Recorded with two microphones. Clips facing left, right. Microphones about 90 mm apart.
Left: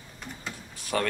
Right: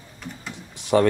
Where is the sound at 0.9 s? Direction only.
20° right (ahead or behind).